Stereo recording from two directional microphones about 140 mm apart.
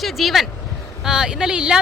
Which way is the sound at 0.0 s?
Centre (ahead or behind).